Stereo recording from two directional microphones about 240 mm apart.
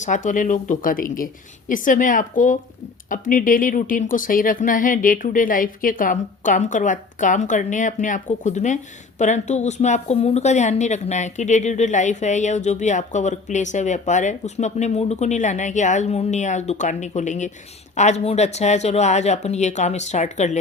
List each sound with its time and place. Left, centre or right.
0.0 s speech: left